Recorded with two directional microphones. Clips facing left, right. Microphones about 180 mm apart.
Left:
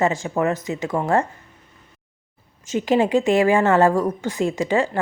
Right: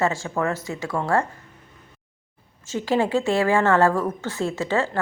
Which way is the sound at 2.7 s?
20° left (ahead or behind).